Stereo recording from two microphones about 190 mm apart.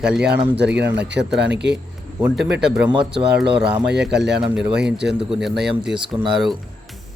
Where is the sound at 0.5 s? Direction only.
65° right (ahead or behind).